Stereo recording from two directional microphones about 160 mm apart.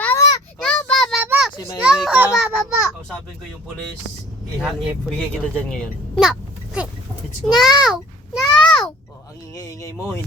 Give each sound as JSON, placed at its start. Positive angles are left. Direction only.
{"t": 0.0, "sound": "a sound", "side_deg": 20}
{"t": 0.6, "sound": "child singing", "side_deg": 5}
{"t": 1.2, "sound": "children playing", "side_deg": -5}
{"t": 1.5, "sound": "a child's voice", "side_deg": 25}
{"t": 1.8, "sound": "children playing", "side_deg": -5}
{"t": 2.4, "sound": "a child's voice", "side_deg": -5}
{"t": 5.0, "sound": "speech", "side_deg": 5}
{"t": 7.4, "sound": "a child's voice", "side_deg": 0}
{"t": 8.6, "sound": "a sound", "side_deg": 0}
{"t": 9.6, "sound": "speech", "side_deg": 20}